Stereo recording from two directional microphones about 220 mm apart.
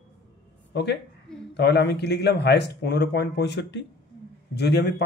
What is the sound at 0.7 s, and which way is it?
A woman's voice, 50° left (ahead or behind).